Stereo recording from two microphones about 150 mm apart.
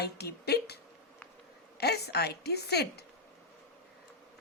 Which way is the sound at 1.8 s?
90° left.